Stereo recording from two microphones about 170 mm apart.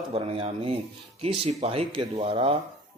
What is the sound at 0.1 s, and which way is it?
Speech, 35° right (ahead or behind).